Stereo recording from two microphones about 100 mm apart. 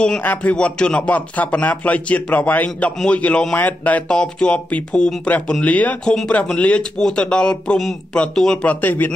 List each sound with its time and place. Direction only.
0.0 s speech: 15° left (ahead or behind)